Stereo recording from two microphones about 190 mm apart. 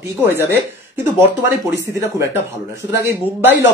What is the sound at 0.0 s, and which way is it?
Speech, 15° right (ahead or behind).